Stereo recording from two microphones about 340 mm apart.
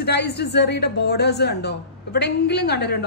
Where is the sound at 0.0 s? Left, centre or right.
Left.